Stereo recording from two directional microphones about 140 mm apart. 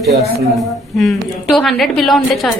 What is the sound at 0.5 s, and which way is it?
A woman's voice, centre (ahead or behind).